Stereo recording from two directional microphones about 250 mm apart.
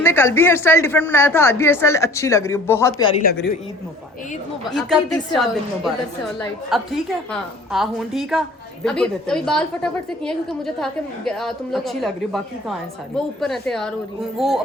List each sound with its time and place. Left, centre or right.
0.0 s speech: centre
3.2 s a woman's voice: left
4.7 s a woman's voice: centre